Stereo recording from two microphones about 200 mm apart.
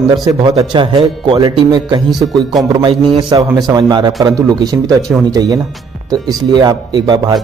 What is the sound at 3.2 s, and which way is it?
A man's voice, 20° right (ahead or behind).